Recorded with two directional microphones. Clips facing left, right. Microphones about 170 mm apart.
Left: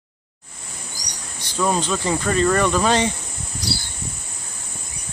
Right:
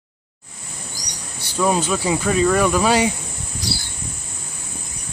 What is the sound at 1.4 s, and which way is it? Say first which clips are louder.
Speech: right 2 dB; 10° right (ahead or behind).